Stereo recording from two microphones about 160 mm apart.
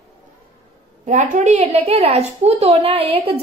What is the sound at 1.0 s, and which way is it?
A woman's voice, 50° right (ahead or behind).